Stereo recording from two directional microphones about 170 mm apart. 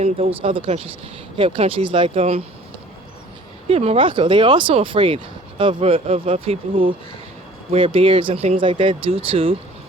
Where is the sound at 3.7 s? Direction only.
35° right (ahead or behind).